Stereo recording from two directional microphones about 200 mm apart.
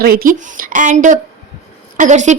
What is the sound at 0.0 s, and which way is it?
A woman's voice, 45° right (ahead or behind).